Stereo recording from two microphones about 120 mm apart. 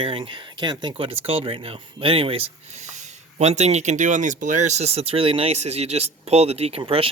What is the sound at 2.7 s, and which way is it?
Speech, 80° right.